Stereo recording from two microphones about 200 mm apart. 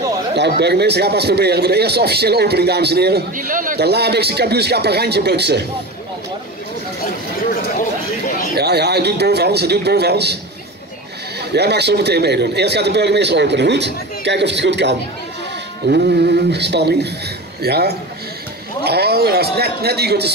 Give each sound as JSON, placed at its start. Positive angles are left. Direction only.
{"t": 0.4, "sound": "speech", "side_deg": -55}
{"t": 8.5, "sound": "speech", "side_deg": -55}
{"t": 11.5, "sound": "speech", "side_deg": -55}